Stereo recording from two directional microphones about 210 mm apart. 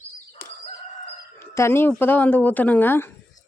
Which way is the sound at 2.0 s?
10° left (ahead or behind).